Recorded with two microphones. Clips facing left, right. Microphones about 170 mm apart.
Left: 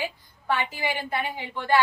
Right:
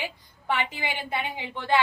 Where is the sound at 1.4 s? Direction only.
20° right (ahead or behind).